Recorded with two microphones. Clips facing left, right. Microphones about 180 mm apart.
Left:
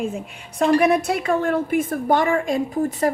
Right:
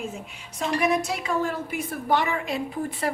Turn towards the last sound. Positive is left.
turn(degrees=45)  # may be behind; listen again after turning